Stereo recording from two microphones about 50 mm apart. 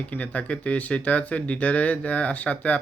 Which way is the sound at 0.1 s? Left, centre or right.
Left.